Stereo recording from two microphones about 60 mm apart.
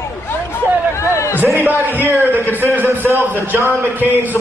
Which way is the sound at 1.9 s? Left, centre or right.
Right.